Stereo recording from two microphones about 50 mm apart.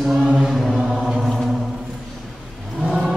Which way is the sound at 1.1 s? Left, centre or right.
Centre.